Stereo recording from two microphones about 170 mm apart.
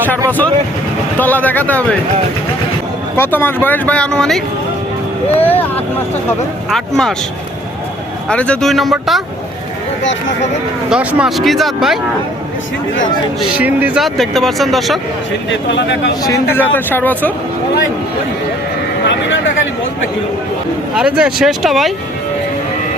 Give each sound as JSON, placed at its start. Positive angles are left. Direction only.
{"t": 0.3, "sound": "speech", "side_deg": 10}
{"t": 3.2, "sound": "speech", "side_deg": 10}
{"t": 8.3, "sound": "speech", "side_deg": 5}
{"t": 10.0, "sound": "speech", "side_deg": 90}
{"t": 10.8, "sound": "speech", "side_deg": -5}
{"t": 13.6, "sound": "speech", "side_deg": -10}
{"t": 15.4, "sound": "speech", "side_deg": 90}
{"t": 16.2, "sound": "speech", "side_deg": 15}
{"t": 20.9, "sound": "speech", "side_deg": -5}